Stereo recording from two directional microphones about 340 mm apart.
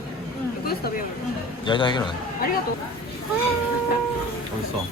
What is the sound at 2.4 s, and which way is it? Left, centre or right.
Speech, left.